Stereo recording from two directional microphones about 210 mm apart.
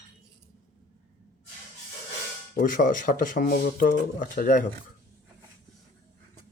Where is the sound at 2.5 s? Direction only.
40° left (ahead or behind).